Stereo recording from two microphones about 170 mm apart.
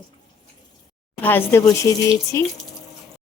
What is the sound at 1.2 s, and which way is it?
A woman's voice, 10° left (ahead or behind).